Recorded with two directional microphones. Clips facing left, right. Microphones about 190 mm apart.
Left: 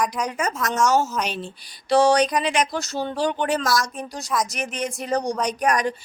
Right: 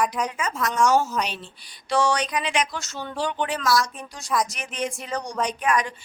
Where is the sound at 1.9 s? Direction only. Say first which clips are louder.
Left 6 dB; 35° left (ahead or behind).